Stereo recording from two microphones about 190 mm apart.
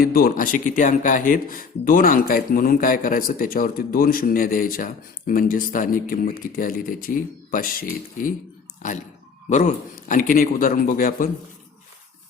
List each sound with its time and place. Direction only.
0.0 s speech: 50° left (ahead or behind)
9.5 s speech: 40° left (ahead or behind)